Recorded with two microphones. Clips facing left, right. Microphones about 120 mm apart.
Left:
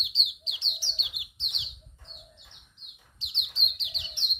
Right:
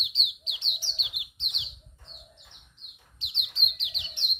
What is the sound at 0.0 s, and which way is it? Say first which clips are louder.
Bird: right 1 dB; 30° left (ahead or behind).